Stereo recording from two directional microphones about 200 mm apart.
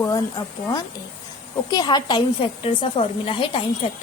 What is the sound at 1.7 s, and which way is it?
A woman's voice, 20° left (ahead or behind).